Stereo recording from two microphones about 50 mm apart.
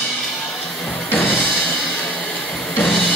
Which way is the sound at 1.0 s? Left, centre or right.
Left.